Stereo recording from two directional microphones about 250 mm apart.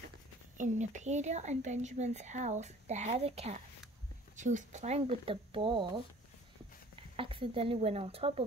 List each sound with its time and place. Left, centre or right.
0.6 s a woman's voice: right
7.2 s a woman's voice: right